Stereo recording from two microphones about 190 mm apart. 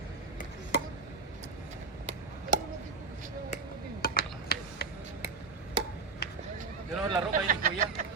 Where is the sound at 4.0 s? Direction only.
50° left (ahead or behind).